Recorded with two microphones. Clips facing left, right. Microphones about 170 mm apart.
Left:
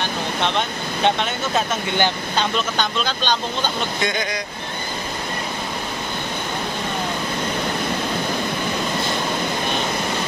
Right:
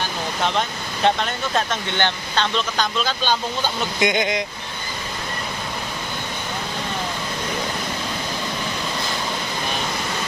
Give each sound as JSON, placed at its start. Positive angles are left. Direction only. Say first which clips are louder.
{"t": 0.4, "sound": "speech", "louder": "right 1 dB", "side_deg": 0}
{"t": 4.0, "sound": "speech", "louder": "right 6 dB", "side_deg": -20}